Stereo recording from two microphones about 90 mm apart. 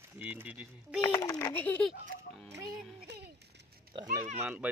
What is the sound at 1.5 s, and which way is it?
Speech, 20° left (ahead or behind).